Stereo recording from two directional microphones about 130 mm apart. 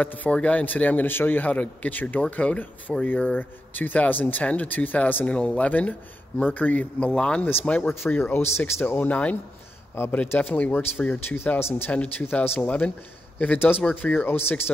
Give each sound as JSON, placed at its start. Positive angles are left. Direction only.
{"t": 0.2, "sound": "speech", "side_deg": 10}